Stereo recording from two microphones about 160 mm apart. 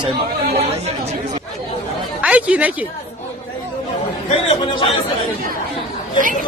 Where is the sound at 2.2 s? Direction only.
10° right (ahead or behind).